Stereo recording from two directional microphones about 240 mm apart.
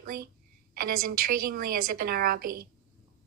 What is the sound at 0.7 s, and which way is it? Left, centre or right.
A woman's voice, right.